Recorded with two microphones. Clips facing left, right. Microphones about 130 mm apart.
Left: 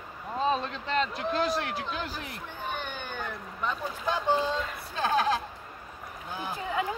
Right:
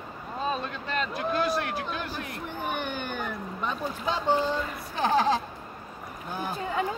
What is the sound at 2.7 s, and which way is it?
Speech, 15° right (ahead or behind).